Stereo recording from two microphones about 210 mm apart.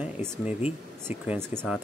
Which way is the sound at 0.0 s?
5° right (ahead or behind).